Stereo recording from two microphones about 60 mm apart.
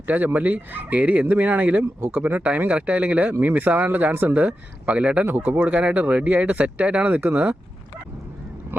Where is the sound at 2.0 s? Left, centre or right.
Right.